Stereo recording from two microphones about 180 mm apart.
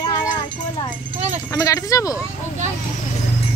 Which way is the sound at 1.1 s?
10° right (ahead or behind).